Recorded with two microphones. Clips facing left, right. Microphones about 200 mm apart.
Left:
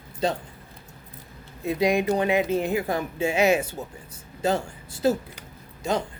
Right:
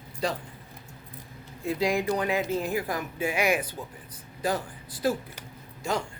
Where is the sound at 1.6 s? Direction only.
20° left (ahead or behind).